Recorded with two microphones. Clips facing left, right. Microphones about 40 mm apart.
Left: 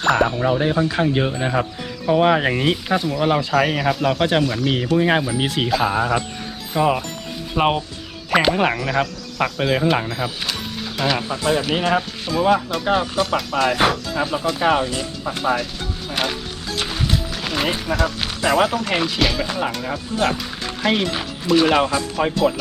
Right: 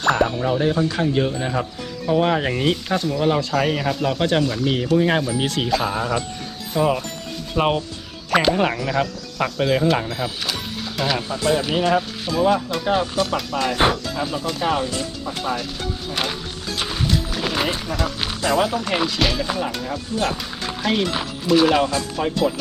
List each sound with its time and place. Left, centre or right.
0.0 s speech: centre
7.5 s rub: centre
8.3 s speech: centre
15.5 s music: centre
17.7 s speech: centre
18.4 s speech: centre
18.8 s speech: centre
20.1 s speech: centre
21.8 s speech: centre